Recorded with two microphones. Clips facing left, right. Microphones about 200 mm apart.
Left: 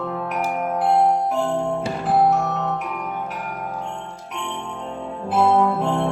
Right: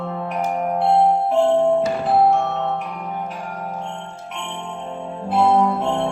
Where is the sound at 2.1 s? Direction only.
30° right (ahead or behind).